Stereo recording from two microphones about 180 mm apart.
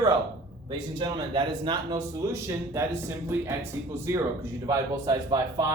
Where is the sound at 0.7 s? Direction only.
25° right (ahead or behind).